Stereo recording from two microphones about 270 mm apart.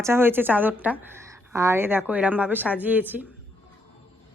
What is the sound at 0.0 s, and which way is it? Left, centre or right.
A woman's voice, centre.